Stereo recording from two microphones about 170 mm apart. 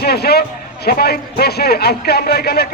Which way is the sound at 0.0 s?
70° left (ahead or behind).